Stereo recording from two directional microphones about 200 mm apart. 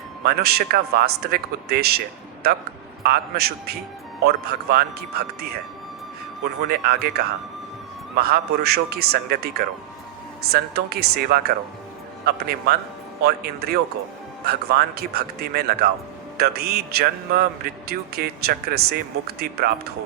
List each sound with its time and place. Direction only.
0.3 s a man's voice: 50° right (ahead or behind)
6.6 s a man's voice: 50° right (ahead or behind)